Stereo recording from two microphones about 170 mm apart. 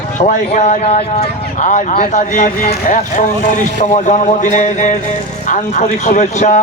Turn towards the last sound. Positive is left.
turn(degrees=45)  # may be behind; listen again after turning